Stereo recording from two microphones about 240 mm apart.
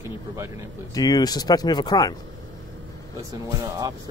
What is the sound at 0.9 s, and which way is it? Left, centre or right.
Speech, centre.